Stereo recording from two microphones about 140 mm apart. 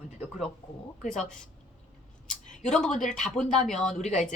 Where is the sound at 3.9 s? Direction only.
55° left (ahead or behind).